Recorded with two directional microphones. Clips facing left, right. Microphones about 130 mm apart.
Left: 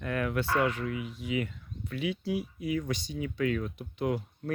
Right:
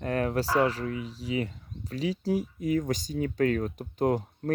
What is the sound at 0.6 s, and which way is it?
Speech, 35° right (ahead or behind).